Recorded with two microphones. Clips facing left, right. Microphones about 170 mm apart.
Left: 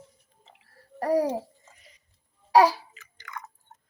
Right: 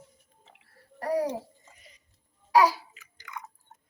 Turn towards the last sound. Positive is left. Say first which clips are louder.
# left 1 dB
turn(degrees=-10)  # may be behind; listen again after turning